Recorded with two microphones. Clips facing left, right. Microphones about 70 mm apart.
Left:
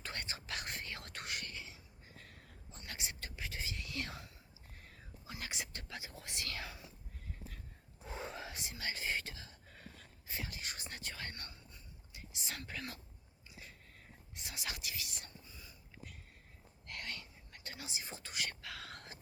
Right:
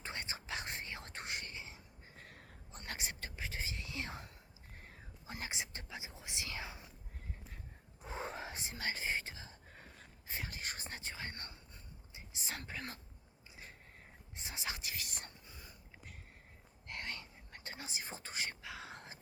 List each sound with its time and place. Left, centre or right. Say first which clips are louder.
0.0 s whispering: right 1 dB; right
8.0 s whispering: right 2 dB; right
14.3 s whispering: right 2 dB; right
16.8 s whispering: right 1 dB; right